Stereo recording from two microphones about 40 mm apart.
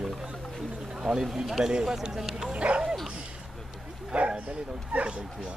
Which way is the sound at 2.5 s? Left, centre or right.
Right.